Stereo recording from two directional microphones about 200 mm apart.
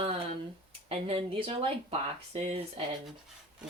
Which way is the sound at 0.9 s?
30° right (ahead or behind).